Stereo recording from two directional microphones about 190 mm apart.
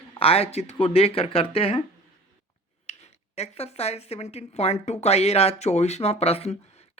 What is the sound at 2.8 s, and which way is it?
Speech, 35° left (ahead or behind).